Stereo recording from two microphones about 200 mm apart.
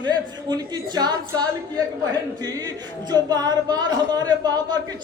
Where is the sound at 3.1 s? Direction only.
20° right (ahead or behind).